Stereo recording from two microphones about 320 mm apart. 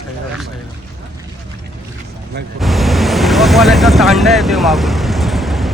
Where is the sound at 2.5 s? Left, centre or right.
Centre.